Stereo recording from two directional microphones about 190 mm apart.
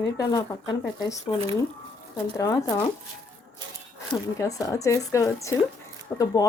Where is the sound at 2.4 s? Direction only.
15° left (ahead or behind).